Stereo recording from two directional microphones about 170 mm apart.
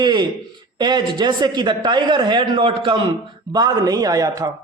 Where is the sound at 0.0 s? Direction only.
25° right (ahead or behind).